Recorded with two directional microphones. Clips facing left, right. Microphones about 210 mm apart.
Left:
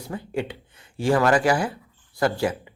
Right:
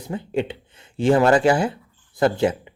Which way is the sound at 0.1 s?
25° right (ahead or behind).